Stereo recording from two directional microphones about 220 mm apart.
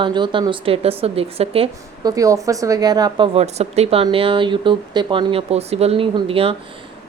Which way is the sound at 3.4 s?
30° right (ahead or behind).